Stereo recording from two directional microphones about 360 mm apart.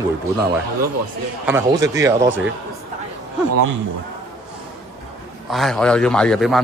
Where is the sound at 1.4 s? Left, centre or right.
Centre.